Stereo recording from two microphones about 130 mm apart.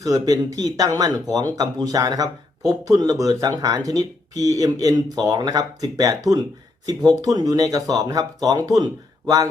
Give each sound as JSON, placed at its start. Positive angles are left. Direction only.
{"t": 0.0, "sound": "speech", "side_deg": -25}